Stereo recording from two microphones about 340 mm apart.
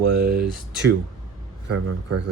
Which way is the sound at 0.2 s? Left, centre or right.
Right.